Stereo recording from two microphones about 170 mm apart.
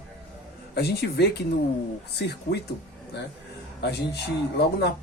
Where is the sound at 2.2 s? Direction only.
85° left.